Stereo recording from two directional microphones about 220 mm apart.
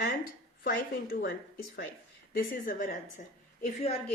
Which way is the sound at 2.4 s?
35° left (ahead or behind).